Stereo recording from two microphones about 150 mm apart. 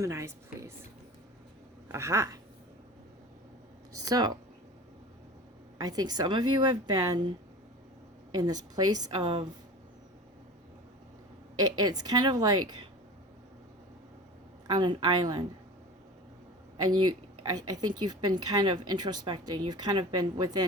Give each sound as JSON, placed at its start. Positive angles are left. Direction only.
{"t": 0.0, "sound": "speech", "side_deg": -20}
{"t": 1.9, "sound": "speech", "side_deg": -20}
{"t": 4.0, "sound": "speech", "side_deg": -25}
{"t": 5.7, "sound": "speech", "side_deg": -25}
{"t": 8.3, "sound": "speech", "side_deg": -25}
{"t": 11.8, "sound": "speech", "side_deg": -25}
{"t": 14.7, "sound": "speech", "side_deg": -30}
{"t": 16.7, "sound": "speech", "side_deg": -25}